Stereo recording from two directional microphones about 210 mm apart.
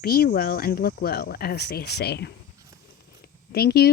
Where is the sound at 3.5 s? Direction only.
50° left (ahead or behind).